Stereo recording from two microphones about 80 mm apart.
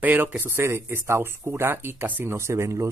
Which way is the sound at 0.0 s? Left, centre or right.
Right.